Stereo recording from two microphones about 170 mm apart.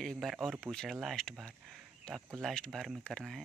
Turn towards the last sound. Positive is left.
turn(degrees=5)  # may be behind; listen again after turning